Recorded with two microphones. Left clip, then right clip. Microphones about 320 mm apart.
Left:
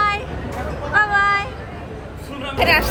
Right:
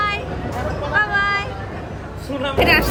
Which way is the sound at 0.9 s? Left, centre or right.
Centre.